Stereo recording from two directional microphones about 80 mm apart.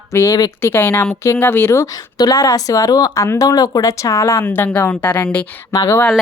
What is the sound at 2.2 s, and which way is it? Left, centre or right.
Speech, left.